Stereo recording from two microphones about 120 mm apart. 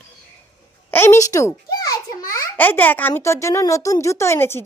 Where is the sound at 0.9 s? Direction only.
20° left (ahead or behind).